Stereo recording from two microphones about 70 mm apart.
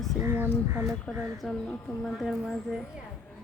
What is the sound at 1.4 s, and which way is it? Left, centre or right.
Speech, centre.